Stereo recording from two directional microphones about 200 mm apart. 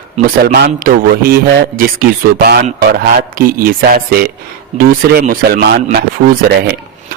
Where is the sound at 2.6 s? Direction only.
35° right (ahead or behind).